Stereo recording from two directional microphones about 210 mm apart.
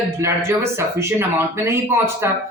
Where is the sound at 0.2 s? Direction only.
15° right (ahead or behind).